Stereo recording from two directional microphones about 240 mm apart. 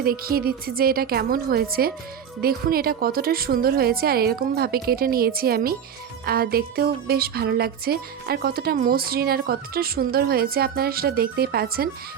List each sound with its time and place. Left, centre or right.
0.0 s music: right